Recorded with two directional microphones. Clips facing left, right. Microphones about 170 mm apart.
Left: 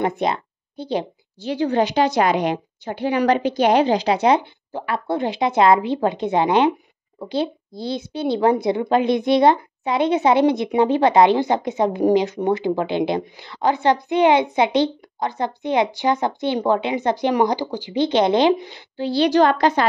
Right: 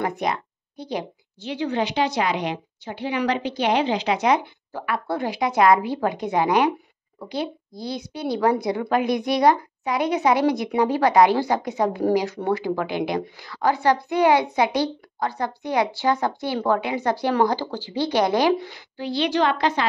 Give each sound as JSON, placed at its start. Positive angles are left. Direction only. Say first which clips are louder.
{"t": 0.0, "sound": "speech", "louder": "left 4 dB", "side_deg": 25}
{"t": 1.5, "sound": "a woman's voice", "louder": "left 5 dB", "side_deg": 40}